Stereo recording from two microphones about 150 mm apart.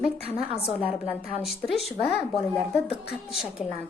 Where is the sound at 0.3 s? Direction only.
40° left (ahead or behind).